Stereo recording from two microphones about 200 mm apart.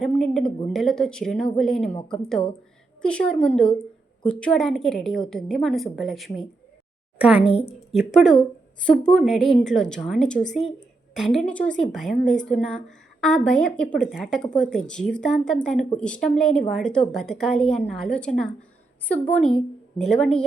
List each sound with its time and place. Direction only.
0.0 s a woman's voice: centre (ahead or behind)
3.0 s a woman's voice: 5° left (ahead or behind)
7.4 s a woman's voice: 30° left (ahead or behind)
7.9 s a woman's voice: centre (ahead or behind)